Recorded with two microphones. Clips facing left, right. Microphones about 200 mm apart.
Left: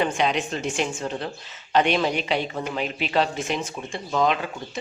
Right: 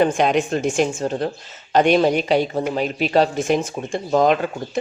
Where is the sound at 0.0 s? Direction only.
50° right (ahead or behind).